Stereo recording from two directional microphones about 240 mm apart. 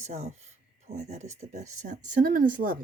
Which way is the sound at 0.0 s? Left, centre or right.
Right.